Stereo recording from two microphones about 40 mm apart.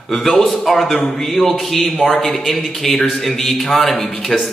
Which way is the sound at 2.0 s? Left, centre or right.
Centre.